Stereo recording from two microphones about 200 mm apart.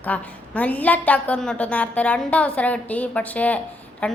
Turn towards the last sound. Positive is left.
turn(degrees=5)  # may be behind; listen again after turning